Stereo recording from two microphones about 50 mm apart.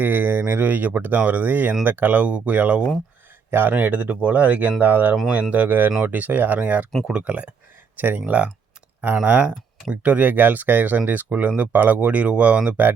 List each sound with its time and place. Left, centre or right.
0.0 s speech: right
3.5 s speech: right
7.9 s speech: right
9.2 s speech: right